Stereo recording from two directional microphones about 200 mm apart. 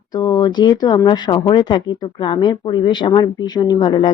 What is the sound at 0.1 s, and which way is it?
A man's voice, 20° left (ahead or behind).